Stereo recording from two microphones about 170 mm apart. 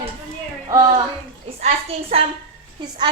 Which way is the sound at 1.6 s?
40° right (ahead or behind).